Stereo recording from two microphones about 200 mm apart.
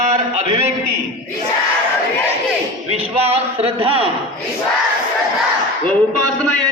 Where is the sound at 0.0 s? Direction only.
35° right (ahead or behind).